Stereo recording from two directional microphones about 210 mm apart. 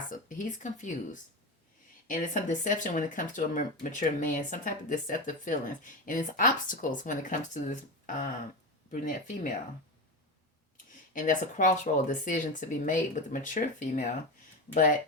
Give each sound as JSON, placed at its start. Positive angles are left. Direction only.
{"t": 0.1, "sound": "speech", "side_deg": 40}
{"t": 11.1, "sound": "speech", "side_deg": 40}